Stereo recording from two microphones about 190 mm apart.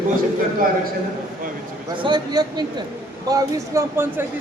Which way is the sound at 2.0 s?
20° right (ahead or behind).